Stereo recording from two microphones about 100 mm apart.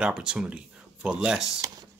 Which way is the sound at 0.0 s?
5° right (ahead or behind).